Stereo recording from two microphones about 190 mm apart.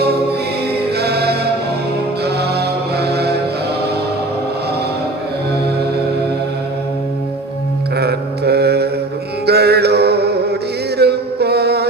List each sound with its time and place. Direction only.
0.9 s music: 60° right (ahead or behind)
2.2 s mantra: 60° right (ahead or behind)
7.9 s mantra: 60° right (ahead or behind)
9.5 s chant: 60° right (ahead or behind)